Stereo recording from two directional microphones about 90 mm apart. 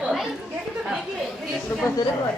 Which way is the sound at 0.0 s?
5° right (ahead or behind).